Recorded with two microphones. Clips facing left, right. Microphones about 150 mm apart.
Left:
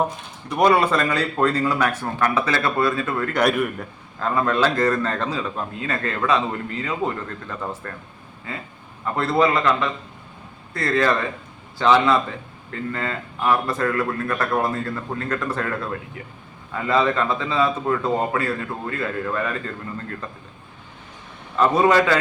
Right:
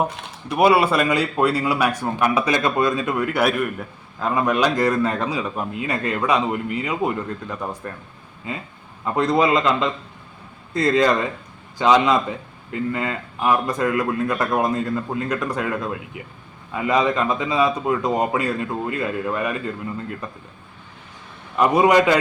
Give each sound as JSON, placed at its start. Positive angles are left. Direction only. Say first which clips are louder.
{"t": 0.5, "sound": "a man's voice", "louder": "right 1 dB", "side_deg": -10}
{"t": 3.4, "sound": "a man's voice", "louder": "even", "side_deg": -5}
{"t": 4.3, "sound": "a man's voice", "louder": "right 1 dB", "side_deg": -15}
{"t": 21.5, "sound": "a man's voice", "louder": "right 1 dB", "side_deg": -15}